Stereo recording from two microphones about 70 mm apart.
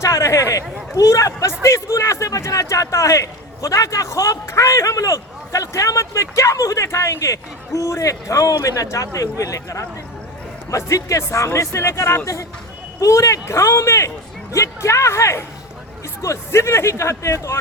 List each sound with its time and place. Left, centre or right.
0.0 s a man's voice: left